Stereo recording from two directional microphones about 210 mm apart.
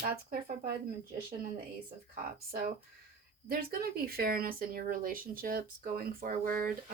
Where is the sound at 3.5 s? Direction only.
45° right (ahead or behind).